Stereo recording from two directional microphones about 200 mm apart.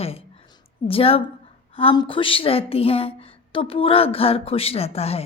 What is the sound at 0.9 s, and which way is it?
A woman's voice, 30° left (ahead or behind).